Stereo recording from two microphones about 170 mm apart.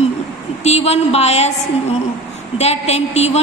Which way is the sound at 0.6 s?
40° left (ahead or behind).